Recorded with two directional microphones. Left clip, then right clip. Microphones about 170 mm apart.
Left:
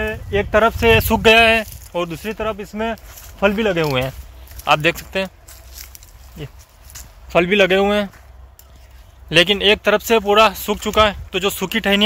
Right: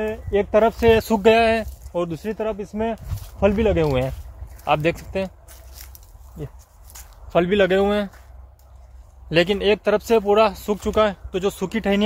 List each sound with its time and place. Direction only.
0.0 s speech: centre (ahead or behind)
5.8 s a sound: 15° left (ahead or behind)
6.9 s speech: 25° left (ahead or behind)
9.3 s speech: 20° left (ahead or behind)